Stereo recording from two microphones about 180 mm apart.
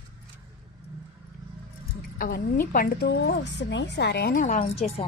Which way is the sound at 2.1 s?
50° left (ahead or behind).